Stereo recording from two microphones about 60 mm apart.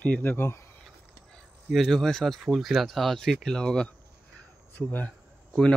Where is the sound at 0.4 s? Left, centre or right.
Left.